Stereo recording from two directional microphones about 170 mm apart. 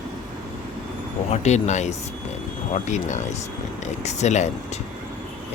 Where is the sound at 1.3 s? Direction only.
40° left (ahead or behind).